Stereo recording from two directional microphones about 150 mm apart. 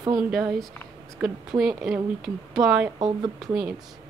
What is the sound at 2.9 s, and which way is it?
Speech, 25° right (ahead or behind).